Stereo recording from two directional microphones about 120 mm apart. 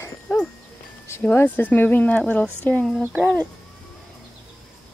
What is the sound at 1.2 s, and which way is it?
Speech, 15° left (ahead or behind).